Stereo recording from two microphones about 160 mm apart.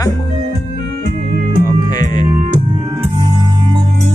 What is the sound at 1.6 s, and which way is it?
Music, 25° left (ahead or behind).